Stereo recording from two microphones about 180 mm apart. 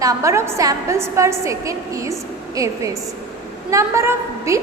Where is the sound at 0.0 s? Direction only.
20° right (ahead or behind).